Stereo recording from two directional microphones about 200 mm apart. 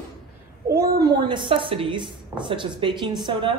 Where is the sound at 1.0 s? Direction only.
20° right (ahead or behind).